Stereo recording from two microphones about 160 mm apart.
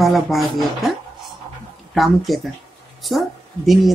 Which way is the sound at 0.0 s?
Centre (ahead or behind).